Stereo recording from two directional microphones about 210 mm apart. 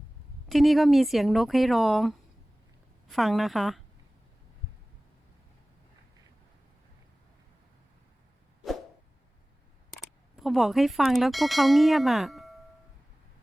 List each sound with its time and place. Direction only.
0.4 s speech: centre (ahead or behind)
9.9 s speech: centre (ahead or behind)